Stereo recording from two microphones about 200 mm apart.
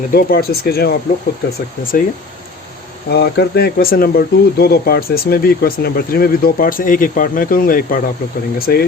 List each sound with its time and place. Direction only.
0.1 s speech: 50° left (ahead or behind)
3.1 s speech: 55° left (ahead or behind)